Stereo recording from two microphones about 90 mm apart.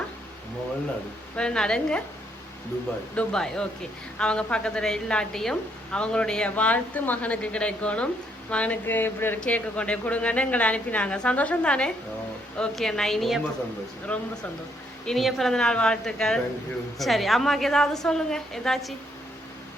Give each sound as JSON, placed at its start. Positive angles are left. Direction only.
{"t": 1.4, "sound": "a woman's voice", "side_deg": 10}
{"t": 3.2, "sound": "a woman's voice", "side_deg": 5}
{"t": 14.1, "sound": "a woman's voice", "side_deg": 15}
{"t": 15.0, "sound": "a woman's voice", "side_deg": 0}